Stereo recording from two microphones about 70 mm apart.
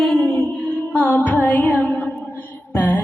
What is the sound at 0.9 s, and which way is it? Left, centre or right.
Music, left.